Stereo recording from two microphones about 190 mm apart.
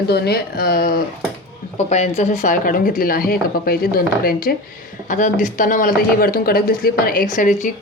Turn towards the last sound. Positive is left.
turn(degrees=45)  # may be behind; listen again after turning